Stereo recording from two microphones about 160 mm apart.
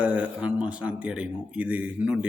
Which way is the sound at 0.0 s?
5° right (ahead or behind).